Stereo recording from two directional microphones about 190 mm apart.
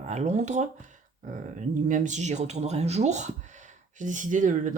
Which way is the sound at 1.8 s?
40° right (ahead or behind).